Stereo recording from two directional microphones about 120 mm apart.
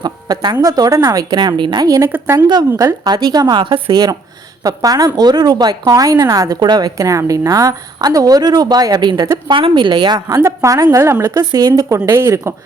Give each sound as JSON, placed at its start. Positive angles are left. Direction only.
{"t": 0.0, "sound": "a woman's voice", "side_deg": -35}